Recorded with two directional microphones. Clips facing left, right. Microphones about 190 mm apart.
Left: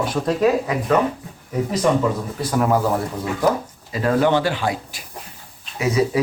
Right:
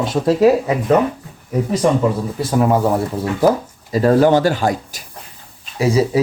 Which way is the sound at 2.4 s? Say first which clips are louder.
Right 3 dB; 20° right (ahead or behind).